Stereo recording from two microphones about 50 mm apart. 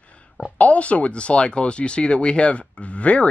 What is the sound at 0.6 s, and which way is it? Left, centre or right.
Speech, left.